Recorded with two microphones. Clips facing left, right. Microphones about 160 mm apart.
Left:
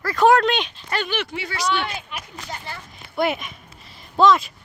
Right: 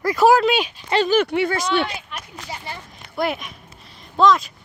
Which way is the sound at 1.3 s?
55° right (ahead or behind).